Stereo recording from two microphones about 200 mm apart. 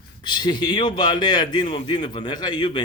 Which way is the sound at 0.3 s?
20° left (ahead or behind).